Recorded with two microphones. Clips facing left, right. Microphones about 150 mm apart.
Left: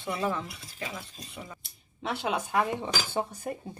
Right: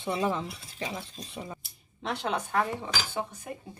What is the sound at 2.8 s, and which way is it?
Speech, 35° left (ahead or behind).